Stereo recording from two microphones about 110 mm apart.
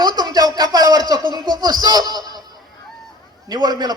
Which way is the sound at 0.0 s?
40° right (ahead or behind).